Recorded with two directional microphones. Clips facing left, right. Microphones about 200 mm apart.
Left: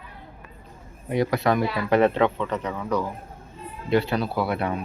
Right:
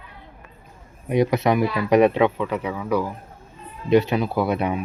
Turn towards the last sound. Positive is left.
turn(degrees=-20)  # may be behind; listen again after turning